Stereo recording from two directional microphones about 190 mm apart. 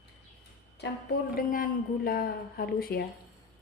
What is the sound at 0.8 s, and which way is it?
Speech, 65° left (ahead or behind).